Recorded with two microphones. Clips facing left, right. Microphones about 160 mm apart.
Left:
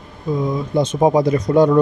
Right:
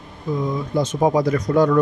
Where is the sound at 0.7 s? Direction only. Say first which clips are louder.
Left 3 dB; 25° left (ahead or behind).